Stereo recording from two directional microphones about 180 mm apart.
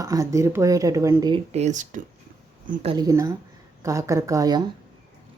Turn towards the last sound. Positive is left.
turn(degrees=-20)  # may be behind; listen again after turning